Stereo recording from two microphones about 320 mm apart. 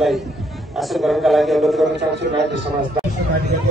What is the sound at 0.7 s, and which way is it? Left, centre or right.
A man's voice, centre.